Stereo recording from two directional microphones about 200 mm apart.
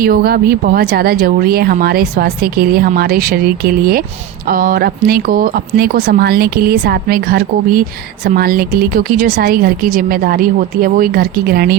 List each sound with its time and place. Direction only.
0.0 s speech: 50° right (ahead or behind)